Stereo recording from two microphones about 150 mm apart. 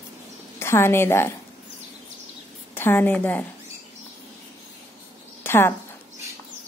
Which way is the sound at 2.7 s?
15° left (ahead or behind).